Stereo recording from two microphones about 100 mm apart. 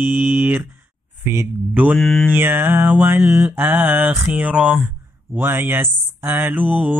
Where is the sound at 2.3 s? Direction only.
20° right (ahead or behind).